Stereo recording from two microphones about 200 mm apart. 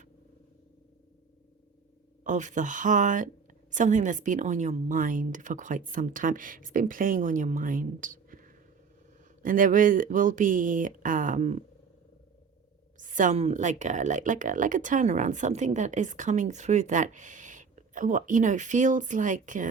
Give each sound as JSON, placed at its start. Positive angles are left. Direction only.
{"t": 2.2, "sound": "speech", "side_deg": -40}
{"t": 13.0, "sound": "speech", "side_deg": -40}